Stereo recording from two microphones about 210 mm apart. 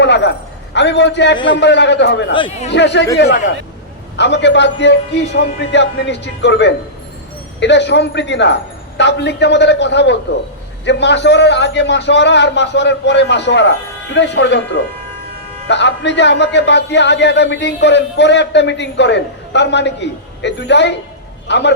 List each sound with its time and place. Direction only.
0.0 s a sound: 55° left (ahead or behind)
1.5 s speech: 55° left (ahead or behind)
2.3 s speech: 30° left (ahead or behind)
2.7 s speech: 55° left (ahead or behind)
4.2 s speech: 55° left (ahead or behind)
15.6 s a man's voice: 55° left (ahead or behind)